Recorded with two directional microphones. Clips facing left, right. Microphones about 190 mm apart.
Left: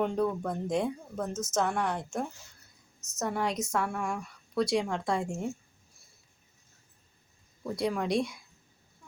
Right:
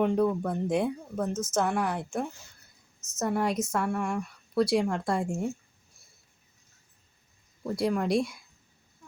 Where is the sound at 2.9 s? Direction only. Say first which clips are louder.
Even; 15° left (ahead or behind).